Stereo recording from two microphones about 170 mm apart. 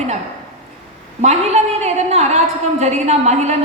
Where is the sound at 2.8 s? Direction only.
40° right (ahead or behind).